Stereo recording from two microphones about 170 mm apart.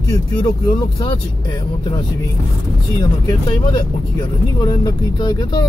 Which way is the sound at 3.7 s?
25° left (ahead or behind).